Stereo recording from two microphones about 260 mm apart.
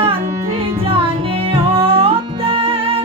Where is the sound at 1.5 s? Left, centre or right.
Right.